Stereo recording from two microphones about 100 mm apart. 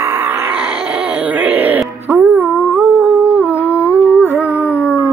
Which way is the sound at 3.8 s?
20° right (ahead or behind).